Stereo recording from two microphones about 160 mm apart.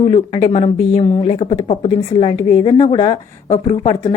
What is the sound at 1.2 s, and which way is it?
A woman's voice, 35° left (ahead or behind).